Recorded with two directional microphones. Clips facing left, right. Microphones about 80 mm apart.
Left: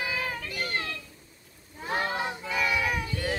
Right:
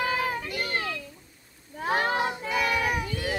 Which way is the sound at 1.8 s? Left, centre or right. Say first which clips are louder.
Right 4 dB; right.